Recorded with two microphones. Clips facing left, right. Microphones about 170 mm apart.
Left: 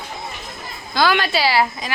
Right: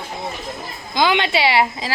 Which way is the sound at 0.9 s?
20° right (ahead or behind).